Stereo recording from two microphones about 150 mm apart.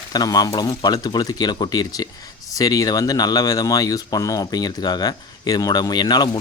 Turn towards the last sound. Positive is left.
turn(degrees=25)  # may be behind; listen again after turning